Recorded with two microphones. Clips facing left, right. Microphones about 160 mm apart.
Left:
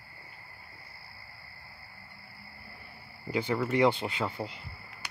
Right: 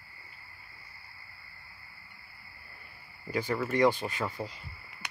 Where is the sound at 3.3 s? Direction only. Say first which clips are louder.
Left 2 dB; 15° left (ahead or behind).